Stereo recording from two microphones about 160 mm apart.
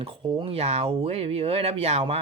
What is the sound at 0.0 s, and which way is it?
Speech, 35° right (ahead or behind).